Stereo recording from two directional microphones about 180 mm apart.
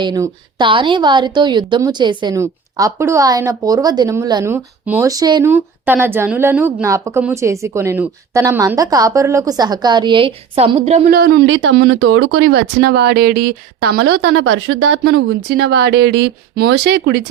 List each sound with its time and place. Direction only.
0.0 s a woman's voice: 25° right (ahead or behind)
11.1 s speech: 60° right (ahead or behind)